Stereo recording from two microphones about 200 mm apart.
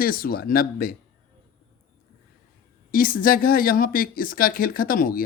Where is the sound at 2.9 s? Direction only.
45° left (ahead or behind).